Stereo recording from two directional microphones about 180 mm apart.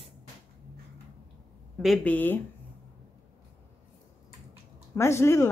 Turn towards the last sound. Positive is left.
turn(degrees=15)  # may be behind; listen again after turning